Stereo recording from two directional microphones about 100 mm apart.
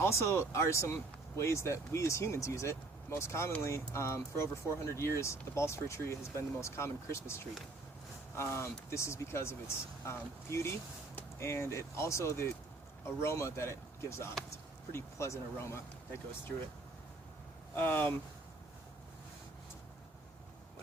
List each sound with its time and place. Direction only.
0.0 s speech: 30° left (ahead or behind)
17.7 s speech: 20° left (ahead or behind)